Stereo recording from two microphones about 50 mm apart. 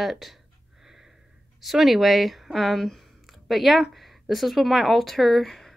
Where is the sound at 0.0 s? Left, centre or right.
Centre.